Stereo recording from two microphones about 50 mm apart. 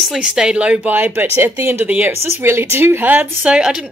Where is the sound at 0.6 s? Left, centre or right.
Right.